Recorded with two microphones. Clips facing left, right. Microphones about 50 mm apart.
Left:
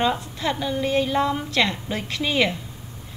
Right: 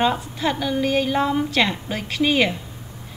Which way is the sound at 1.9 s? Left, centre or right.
Right.